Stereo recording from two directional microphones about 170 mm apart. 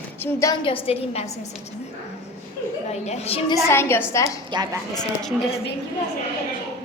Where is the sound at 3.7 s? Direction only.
15° left (ahead or behind).